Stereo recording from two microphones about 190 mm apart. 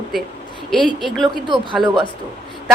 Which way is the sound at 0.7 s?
Centre (ahead or behind).